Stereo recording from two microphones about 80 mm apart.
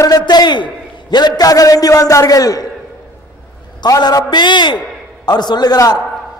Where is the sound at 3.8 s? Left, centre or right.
Left.